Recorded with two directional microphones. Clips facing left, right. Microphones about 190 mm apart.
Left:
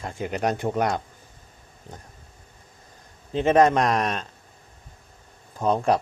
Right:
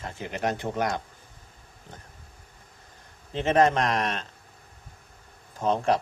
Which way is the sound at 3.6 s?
35° left (ahead or behind).